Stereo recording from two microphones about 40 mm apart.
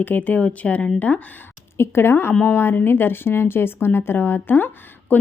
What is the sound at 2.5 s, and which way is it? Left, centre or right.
Speech, left.